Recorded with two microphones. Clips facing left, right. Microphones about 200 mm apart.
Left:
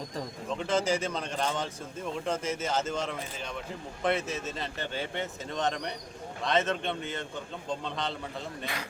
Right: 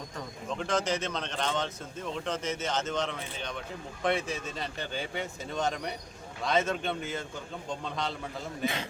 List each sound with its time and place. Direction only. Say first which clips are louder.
0.5 s speech: left 2 dB; 5° left (ahead or behind)
8.6 s a man's voice: right 10 dB; 25° right (ahead or behind)